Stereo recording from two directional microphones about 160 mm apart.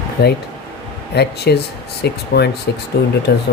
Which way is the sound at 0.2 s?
90° left.